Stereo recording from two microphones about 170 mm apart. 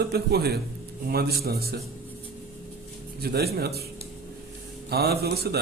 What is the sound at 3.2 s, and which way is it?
Speech, 65° right (ahead or behind).